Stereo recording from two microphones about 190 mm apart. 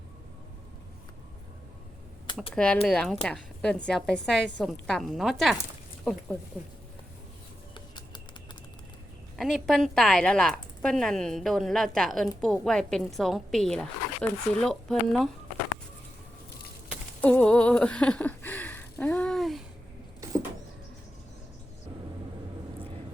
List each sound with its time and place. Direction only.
2.5 s a woman's voice: 5° left (ahead or behind)
7.7 s bird: 25° left (ahead or behind)
9.3 s a woman's voice: centre (ahead or behind)
17.2 s a sound: 5° left (ahead or behind)